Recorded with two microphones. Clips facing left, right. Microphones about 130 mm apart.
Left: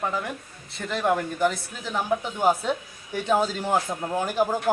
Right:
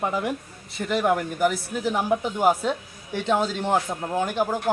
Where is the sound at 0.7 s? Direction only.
5° right (ahead or behind).